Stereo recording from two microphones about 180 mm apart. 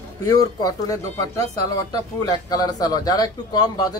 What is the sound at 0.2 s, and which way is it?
Speech, 20° left (ahead or behind).